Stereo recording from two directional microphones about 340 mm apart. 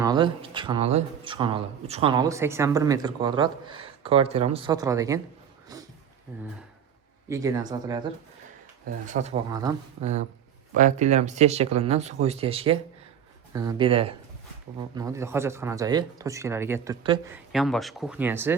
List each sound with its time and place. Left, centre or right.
0.0 s speech: centre
5.7 s a sound: centre
6.3 s speech: centre
9.0 s speech: centre